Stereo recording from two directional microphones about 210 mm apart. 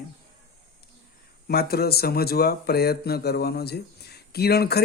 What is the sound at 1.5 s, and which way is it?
Speech, 45° left (ahead or behind).